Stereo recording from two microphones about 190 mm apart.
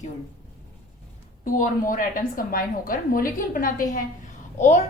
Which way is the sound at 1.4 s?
45° left (ahead or behind).